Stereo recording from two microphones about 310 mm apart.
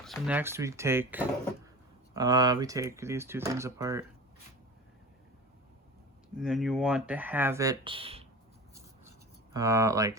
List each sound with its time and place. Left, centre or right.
0.0 s speech: centre
6.3 s speech: centre
9.0 s writing: centre